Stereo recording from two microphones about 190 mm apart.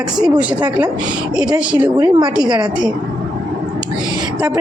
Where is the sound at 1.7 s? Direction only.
5° right (ahead or behind).